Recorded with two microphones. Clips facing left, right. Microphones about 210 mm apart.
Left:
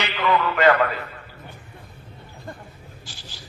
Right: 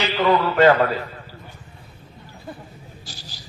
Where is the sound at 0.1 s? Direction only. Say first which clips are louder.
Right 3 dB; 35° right (ahead or behind).